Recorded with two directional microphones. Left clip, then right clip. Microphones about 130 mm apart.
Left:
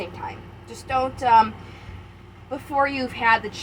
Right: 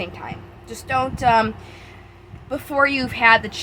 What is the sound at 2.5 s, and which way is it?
Speech, 65° right (ahead or behind).